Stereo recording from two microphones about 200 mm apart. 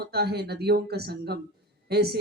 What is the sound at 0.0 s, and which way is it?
A woman's voice, 55° right (ahead or behind).